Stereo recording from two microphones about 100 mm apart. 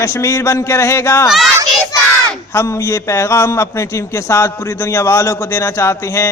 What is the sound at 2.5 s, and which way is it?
Speech, 30° left (ahead or behind).